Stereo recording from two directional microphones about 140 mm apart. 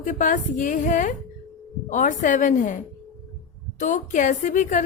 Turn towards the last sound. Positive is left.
turn(degrees=65)  # may be behind; listen again after turning